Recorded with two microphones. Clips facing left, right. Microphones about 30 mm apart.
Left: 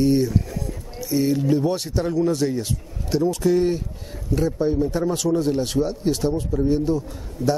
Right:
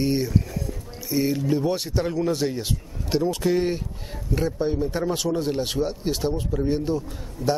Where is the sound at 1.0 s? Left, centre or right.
Centre.